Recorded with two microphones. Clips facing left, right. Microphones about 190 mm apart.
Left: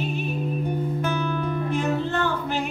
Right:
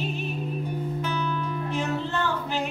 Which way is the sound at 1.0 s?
50° left (ahead or behind).